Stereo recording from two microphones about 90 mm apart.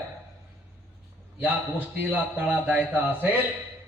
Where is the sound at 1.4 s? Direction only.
20° right (ahead or behind).